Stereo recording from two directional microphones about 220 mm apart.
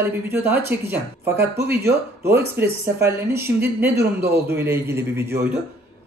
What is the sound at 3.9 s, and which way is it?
Speech, 45° right (ahead or behind).